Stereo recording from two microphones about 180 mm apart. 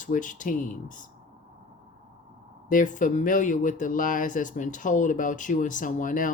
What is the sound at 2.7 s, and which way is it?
Speech, 45° left (ahead or behind).